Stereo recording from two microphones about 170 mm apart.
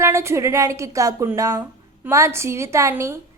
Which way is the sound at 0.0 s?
15° right (ahead or behind).